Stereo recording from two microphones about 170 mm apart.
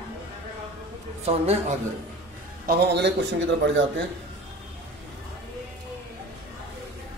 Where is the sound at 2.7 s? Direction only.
75° right (ahead or behind); by 3.8 s 90° right.